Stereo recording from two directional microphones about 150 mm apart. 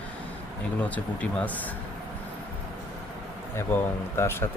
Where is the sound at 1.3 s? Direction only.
10° left (ahead or behind).